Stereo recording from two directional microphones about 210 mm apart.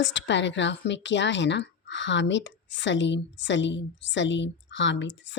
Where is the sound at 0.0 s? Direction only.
60° left (ahead or behind).